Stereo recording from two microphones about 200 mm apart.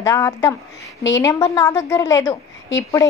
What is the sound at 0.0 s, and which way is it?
A woman's voice, 15° left (ahead or behind).